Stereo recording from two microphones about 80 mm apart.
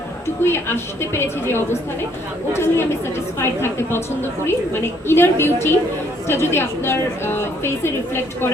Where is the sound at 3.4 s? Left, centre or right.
Left.